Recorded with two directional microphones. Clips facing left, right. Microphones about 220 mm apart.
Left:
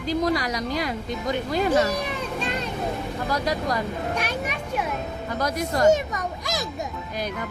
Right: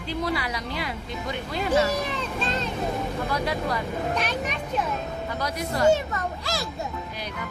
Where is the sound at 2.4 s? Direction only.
15° left (ahead or behind).